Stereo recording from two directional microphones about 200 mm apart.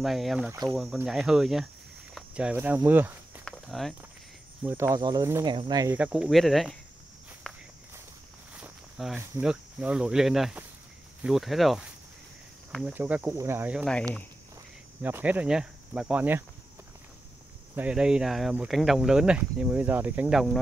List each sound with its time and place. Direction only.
0.0 s speech: centre (ahead or behind)
3.4 s walk: centre (ahead or behind)
4.6 s speech: 15° right (ahead or behind)
5.9 s speech: 5° right (ahead or behind)
7.5 s walk: 5° left (ahead or behind)
8.5 s speech: 5° right (ahead or behind)
17.7 s speech: 5° right (ahead or behind)